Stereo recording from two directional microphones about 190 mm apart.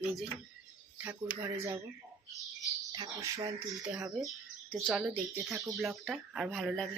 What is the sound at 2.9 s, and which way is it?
Speech, 20° right (ahead or behind).